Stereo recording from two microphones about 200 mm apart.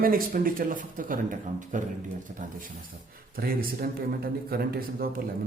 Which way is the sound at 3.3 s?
45° right (ahead or behind).